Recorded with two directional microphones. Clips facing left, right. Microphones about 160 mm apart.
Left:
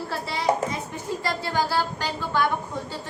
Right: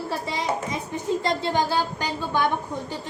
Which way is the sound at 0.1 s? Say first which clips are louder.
Right 3 dB; 15° right (ahead or behind).